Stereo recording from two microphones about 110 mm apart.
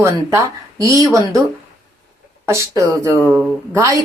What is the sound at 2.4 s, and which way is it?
Speech, 25° right (ahead or behind).